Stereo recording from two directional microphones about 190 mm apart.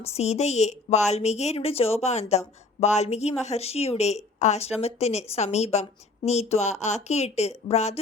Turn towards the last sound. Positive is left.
turn(degrees=35)  # may be behind; listen again after turning